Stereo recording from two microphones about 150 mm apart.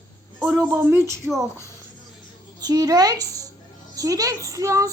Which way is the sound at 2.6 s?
25° right (ahead or behind).